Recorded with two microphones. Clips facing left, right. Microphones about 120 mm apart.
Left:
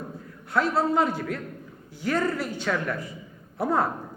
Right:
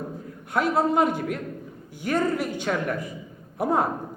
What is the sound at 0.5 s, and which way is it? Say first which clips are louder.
A man's voice: right 1 dB; 50° right (ahead or behind).